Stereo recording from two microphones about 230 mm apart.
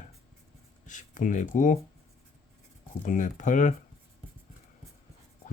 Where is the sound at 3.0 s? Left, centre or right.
Left.